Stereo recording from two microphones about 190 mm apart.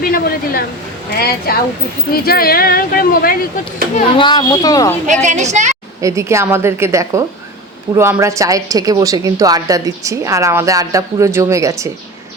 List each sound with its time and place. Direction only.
0.0 s speech: 50° left (ahead or behind)
3.9 s speech: 30° left (ahead or behind)
5.2 s a woman's voice: 40° right (ahead or behind)
6.0 s speech: 15° right (ahead or behind)